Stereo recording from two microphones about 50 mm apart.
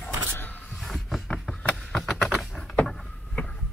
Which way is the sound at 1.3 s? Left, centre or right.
Centre.